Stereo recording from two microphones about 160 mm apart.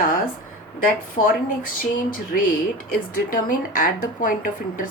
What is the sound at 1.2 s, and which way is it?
Speech, 45° left (ahead or behind).